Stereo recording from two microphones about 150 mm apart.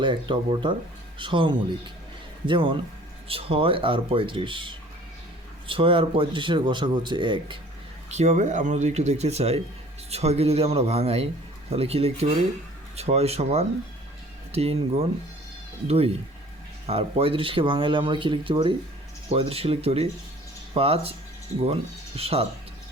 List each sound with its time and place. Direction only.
0.0 s speech: 35° right (ahead or behind)
8.1 s speech: 50° right (ahead or behind)